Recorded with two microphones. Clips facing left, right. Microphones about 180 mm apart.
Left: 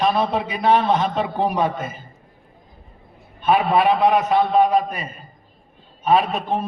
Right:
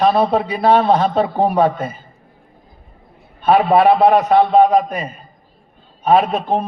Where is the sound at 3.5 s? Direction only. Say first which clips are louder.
Right 5 dB; 40° right (ahead or behind).